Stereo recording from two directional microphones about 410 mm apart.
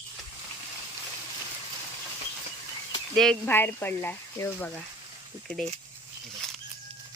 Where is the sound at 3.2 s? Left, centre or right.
Centre.